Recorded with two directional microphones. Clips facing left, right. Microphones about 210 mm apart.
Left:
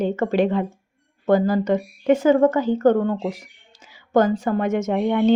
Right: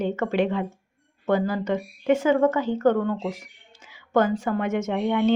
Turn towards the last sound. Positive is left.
turn(degrees=35)  # may be behind; listen again after turning